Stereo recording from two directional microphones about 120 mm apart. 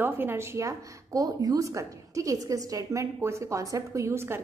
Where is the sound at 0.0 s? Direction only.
20° right (ahead or behind).